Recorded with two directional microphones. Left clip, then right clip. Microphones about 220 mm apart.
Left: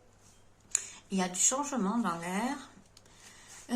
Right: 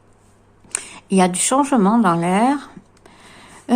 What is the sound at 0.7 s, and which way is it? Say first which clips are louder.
Speech: right 11 dB; 60° right (ahead or behind).